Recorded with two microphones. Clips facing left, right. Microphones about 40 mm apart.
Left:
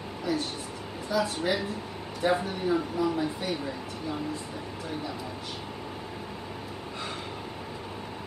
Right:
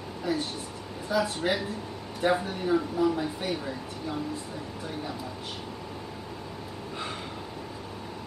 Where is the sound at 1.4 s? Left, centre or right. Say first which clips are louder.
Even; centre.